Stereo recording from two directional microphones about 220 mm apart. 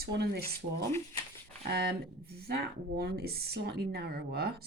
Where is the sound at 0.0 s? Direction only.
45° right (ahead or behind).